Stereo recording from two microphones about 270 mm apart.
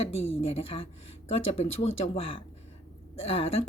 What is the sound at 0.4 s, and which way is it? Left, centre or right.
A woman's voice, left.